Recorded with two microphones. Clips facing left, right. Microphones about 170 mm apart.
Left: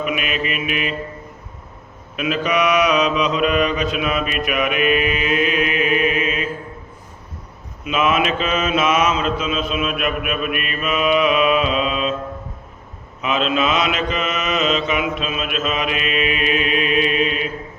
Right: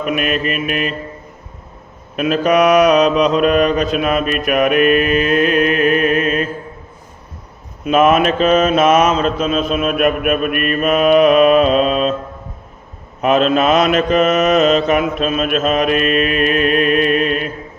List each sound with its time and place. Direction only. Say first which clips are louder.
0.0 s mantra: right 5 dB; 45° right (ahead or behind)
2.1 s mantra: right 6 dB; 45° right (ahead or behind)
7.9 s mantra: right 7 dB; 45° right (ahead or behind)
13.2 s mantra: right 7 dB; 50° right (ahead or behind)